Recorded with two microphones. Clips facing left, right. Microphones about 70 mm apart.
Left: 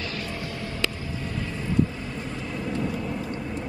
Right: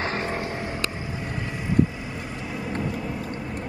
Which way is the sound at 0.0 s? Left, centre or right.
Right.